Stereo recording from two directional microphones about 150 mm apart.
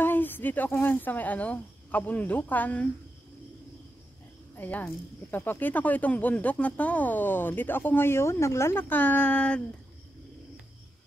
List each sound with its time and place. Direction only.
0.0 s speech: 15° left (ahead or behind)
4.6 s speech: 10° left (ahead or behind)